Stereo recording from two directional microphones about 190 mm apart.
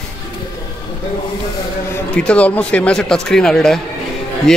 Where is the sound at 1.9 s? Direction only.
5° left (ahead or behind).